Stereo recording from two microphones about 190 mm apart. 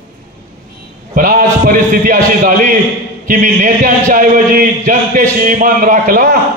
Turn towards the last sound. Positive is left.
turn(degrees=-45)  # may be behind; listen again after turning